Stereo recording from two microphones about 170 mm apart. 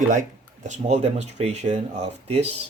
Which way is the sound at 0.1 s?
45° right (ahead or behind).